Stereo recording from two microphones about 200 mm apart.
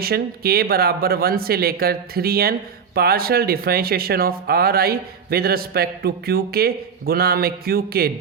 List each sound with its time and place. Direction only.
0.0 s speech: 50° right (ahead or behind)